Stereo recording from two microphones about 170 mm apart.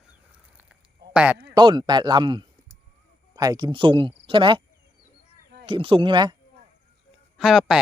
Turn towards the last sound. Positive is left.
turn(degrees=0)  # may be behind; listen again after turning